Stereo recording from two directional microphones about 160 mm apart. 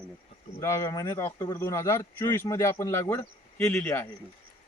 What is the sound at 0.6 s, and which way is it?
Speech, 20° left (ahead or behind).